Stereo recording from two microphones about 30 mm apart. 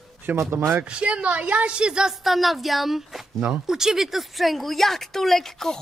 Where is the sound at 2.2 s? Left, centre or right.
Centre.